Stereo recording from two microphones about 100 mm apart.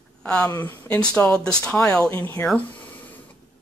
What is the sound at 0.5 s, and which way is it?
Speech, 20° left (ahead or behind).